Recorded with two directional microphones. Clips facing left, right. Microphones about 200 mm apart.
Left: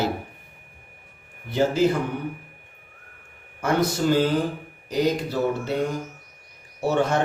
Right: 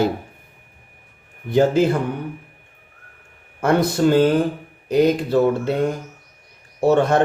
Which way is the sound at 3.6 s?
60° right (ahead or behind).